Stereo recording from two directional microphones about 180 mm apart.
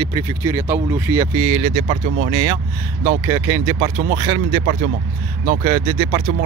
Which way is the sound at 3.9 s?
50° right (ahead or behind).